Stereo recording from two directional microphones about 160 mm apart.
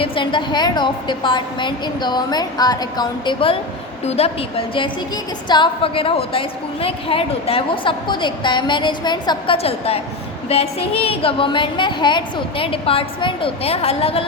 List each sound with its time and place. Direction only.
0.0 s a woman's voice: 30° left (ahead or behind)